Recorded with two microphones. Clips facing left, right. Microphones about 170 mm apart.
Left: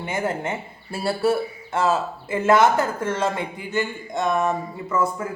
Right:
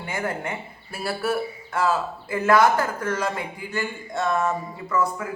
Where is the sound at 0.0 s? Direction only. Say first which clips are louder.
Left 3 dB; 20° left (ahead or behind).